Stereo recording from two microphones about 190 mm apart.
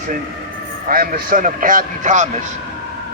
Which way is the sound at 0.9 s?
50° right (ahead or behind).